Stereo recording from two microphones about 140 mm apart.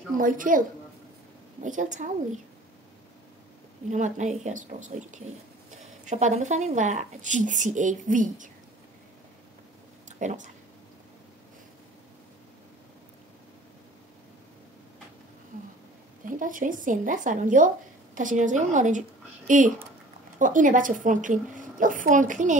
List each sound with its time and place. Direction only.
0.2 s a woman's voice: 75° right (ahead or behind)
1.6 s speech: 65° right (ahead or behind)
3.9 s speech: 60° right (ahead or behind)
10.0 s a sound: 60° right (ahead or behind)
16.3 s a woman's voice: 75° right (ahead or behind)